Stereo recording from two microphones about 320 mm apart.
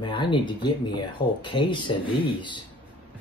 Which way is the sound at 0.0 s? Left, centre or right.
Centre.